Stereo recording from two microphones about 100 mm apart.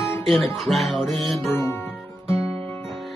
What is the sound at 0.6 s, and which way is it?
Music, centre (ahead or behind).